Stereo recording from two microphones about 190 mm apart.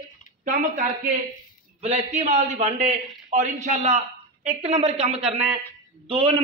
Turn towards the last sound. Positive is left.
turn(degrees=-30)  # may be behind; listen again after turning